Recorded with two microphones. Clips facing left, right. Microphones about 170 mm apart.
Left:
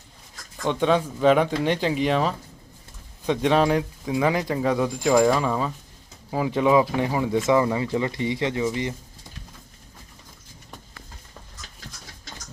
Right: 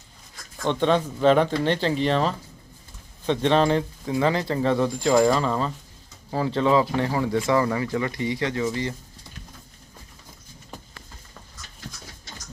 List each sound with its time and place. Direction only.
0.6 s speech: 5° left (ahead or behind)